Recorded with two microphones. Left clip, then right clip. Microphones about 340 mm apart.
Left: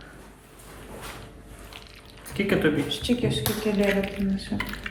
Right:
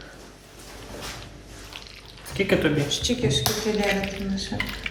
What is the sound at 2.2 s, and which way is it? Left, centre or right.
Drip, centre.